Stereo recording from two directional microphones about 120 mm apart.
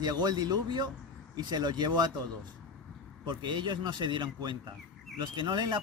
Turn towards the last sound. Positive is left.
turn(degrees=-40)  # may be behind; listen again after turning